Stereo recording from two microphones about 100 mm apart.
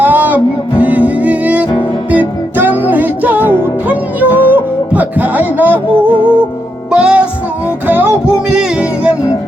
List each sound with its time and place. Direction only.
0.0 s music: 15° right (ahead or behind)
6.1 s music: 15° left (ahead or behind)
6.9 s music: 10° right (ahead or behind)
7.9 s music: 20° right (ahead or behind)
8.4 s music: 10° right (ahead or behind)